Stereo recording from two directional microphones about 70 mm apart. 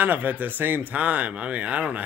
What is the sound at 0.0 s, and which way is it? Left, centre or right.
Speech, right.